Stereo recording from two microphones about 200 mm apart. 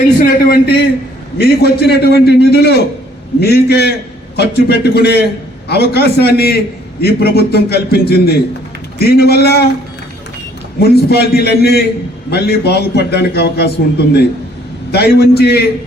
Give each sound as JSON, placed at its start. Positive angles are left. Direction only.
{"t": 0.2, "sound": "a man's voice", "side_deg": 50}
{"t": 10.8, "sound": "a man's voice", "side_deg": 50}